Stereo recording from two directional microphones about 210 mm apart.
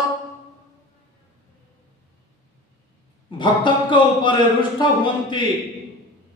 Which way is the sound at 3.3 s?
25° left (ahead or behind).